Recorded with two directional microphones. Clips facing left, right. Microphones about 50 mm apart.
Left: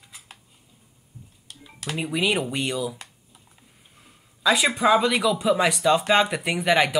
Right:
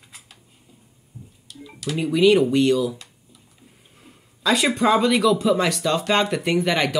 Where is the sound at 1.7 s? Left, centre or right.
Left.